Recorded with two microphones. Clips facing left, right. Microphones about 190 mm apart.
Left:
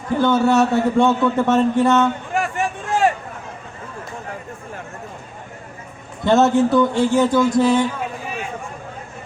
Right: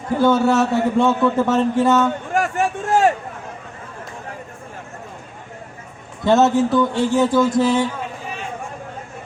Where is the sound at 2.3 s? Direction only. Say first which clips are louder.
Right 2 dB; 45° right (ahead or behind).